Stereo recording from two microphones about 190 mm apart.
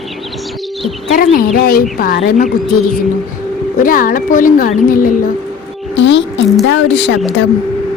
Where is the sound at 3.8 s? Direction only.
45° left (ahead or behind).